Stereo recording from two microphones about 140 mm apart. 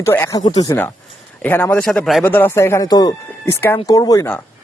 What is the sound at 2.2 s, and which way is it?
Speech, 15° left (ahead or behind).